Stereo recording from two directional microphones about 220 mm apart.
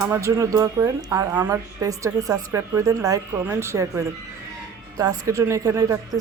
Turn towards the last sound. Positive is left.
turn(degrees=-15)  # may be behind; listen again after turning